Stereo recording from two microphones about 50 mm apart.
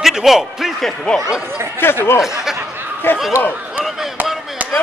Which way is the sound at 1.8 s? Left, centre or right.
Left.